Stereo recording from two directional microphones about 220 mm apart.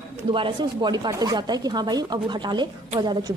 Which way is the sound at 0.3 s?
20° right (ahead or behind).